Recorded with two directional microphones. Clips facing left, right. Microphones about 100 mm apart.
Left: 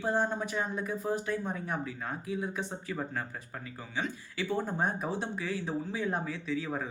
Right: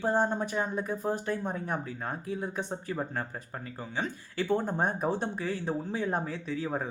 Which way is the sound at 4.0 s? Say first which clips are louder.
Right 2 dB; 45° right (ahead or behind).